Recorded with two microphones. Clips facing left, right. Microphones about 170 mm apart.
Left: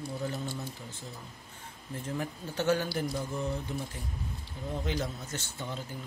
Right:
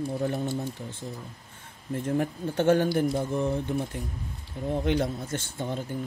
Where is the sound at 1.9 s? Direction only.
55° right (ahead or behind).